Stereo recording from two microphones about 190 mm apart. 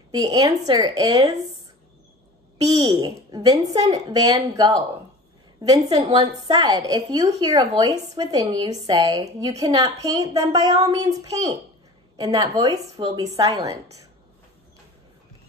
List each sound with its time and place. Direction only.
0.1 s speech: 20° right (ahead or behind)
2.8 s speech: 20° right (ahead or behind)